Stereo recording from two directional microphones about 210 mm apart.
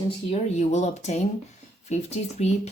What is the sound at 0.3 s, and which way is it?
Speech, 30° left (ahead or behind).